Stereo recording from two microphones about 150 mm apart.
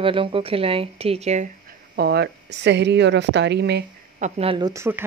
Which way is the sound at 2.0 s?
90° right.